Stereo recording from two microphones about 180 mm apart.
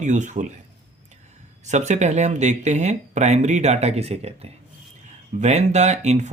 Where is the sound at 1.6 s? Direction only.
40° right (ahead or behind).